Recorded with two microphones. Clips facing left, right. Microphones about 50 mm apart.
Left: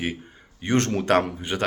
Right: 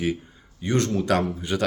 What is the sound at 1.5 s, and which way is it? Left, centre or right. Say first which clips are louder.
Speech: right 1 dB; left.